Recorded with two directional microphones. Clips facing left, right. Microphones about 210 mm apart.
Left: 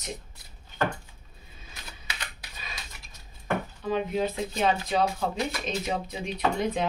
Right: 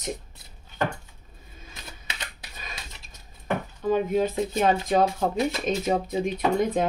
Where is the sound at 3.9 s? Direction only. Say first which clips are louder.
Right 4 dB; 45° right (ahead or behind).